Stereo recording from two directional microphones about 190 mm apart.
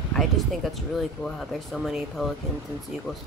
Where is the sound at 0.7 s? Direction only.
Centre (ahead or behind).